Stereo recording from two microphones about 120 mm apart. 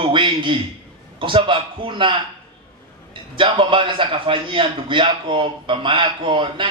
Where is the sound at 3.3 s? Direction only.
45° right (ahead or behind).